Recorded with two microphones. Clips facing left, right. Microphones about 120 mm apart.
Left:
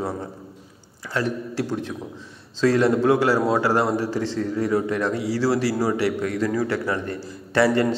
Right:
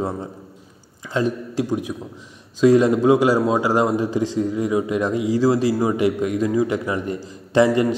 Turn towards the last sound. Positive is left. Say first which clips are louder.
# right 3 dB
turn(degrees=-15)  # may be behind; listen again after turning